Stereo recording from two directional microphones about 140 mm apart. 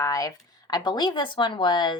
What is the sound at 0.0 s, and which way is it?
Speech, 25° left (ahead or behind).